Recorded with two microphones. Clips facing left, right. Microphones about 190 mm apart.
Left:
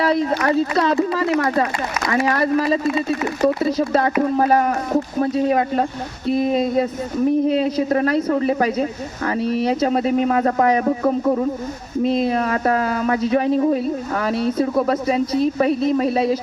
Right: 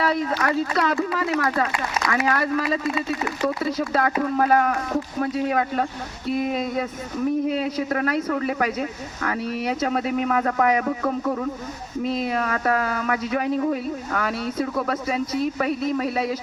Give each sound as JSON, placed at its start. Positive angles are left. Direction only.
{"t": 0.0, "sound": "speech", "side_deg": 30}